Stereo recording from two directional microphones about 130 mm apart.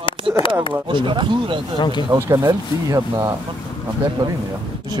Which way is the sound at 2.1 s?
25° right (ahead or behind).